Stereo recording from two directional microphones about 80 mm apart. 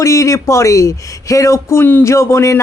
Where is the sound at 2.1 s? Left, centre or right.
Left.